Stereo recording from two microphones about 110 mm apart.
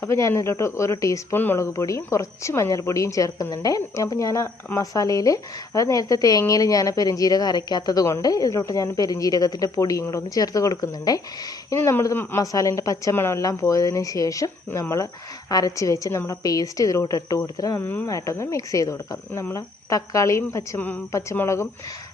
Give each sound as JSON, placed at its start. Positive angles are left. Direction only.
{"t": 0.0, "sound": "speech", "side_deg": 25}
{"t": 11.8, "sound": "speech", "side_deg": 25}
{"t": 12.4, "sound": "speech", "side_deg": 30}
{"t": 17.7, "sound": "speech", "side_deg": 15}
{"t": 18.0, "sound": "speech", "side_deg": 30}